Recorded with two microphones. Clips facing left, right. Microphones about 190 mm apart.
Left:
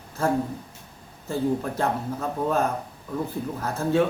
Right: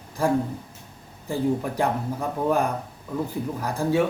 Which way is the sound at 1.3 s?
15° right (ahead or behind).